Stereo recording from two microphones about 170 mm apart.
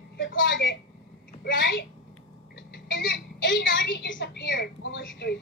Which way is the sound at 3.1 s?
90° left.